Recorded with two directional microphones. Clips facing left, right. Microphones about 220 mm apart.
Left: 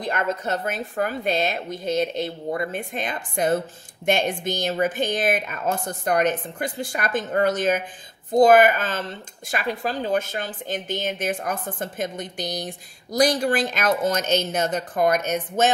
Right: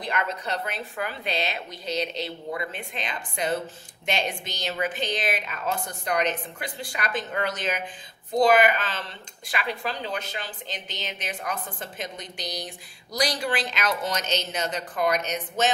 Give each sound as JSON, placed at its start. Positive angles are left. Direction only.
{"t": 0.0, "sound": "speech", "side_deg": 45}